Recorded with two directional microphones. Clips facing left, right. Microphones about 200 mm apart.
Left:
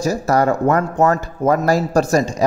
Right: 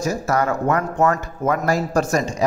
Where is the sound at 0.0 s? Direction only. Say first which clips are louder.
Left 4 dB; 35° left (ahead or behind).